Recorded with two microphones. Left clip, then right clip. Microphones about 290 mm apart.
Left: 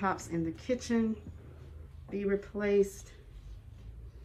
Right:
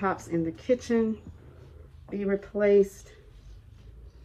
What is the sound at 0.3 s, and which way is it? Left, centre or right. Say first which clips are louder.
Speech: right 7 dB; centre.